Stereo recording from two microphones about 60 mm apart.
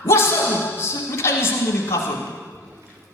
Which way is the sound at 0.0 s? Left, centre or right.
Left.